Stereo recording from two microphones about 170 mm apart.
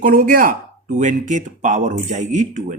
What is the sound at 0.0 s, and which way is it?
Speech, 55° right (ahead or behind).